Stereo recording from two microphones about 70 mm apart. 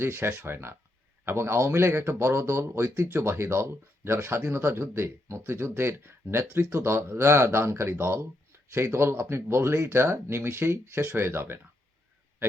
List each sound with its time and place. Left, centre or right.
0.0 s speech: right